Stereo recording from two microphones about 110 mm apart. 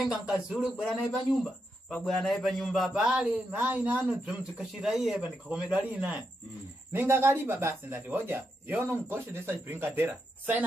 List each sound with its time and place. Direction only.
0.1 s speech: 5° right (ahead or behind)
1.4 s a man's voice: 10° left (ahead or behind); by 10.6 s 20° right (ahead or behind)